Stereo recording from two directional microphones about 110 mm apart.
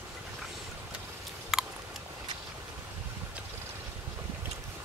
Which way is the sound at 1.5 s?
Centre (ahead or behind).